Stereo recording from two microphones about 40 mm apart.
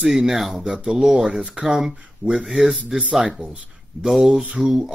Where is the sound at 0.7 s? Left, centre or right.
Centre.